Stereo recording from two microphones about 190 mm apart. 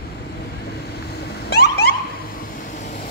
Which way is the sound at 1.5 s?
55° left (ahead or behind).